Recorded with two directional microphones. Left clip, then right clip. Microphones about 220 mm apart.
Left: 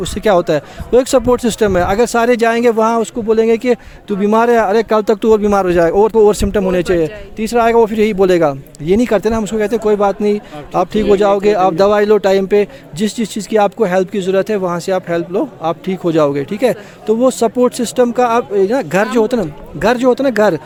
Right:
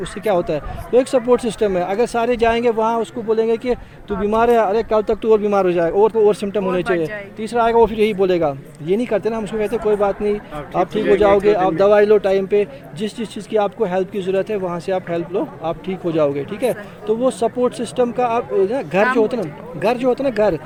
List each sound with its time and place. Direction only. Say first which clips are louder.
0.0 s speech: left 6 dB; 55° left (ahead or behind)